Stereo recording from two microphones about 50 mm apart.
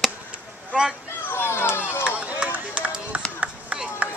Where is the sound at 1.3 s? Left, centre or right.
Left.